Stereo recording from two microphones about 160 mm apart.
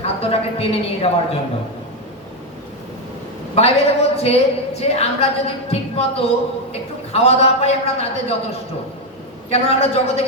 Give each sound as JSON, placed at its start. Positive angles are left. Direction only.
{"t": 0.0, "sound": "a woman's voice", "side_deg": 40}
{"t": 3.5, "sound": "a woman's voice", "side_deg": 40}
{"t": 9.5, "sound": "a woman's voice", "side_deg": 40}